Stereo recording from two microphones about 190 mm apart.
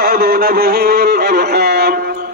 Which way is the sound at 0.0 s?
55° right (ahead or behind).